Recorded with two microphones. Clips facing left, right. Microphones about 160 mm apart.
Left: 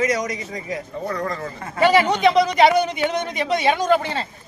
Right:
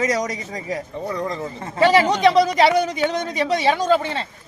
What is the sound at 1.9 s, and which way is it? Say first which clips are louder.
Speech: right 1 dB; 35° right (ahead or behind).